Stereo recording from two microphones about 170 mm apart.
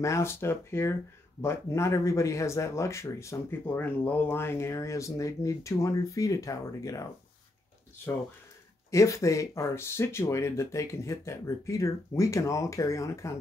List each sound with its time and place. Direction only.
0.0 s speech: 15° left (ahead or behind)
8.9 s speech: 15° left (ahead or behind)